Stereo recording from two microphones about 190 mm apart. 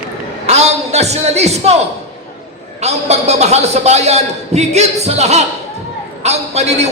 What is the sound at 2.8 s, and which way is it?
A man's voice, 35° right (ahead or behind).